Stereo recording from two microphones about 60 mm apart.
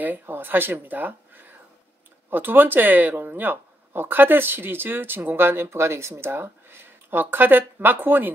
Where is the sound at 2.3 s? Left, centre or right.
Right.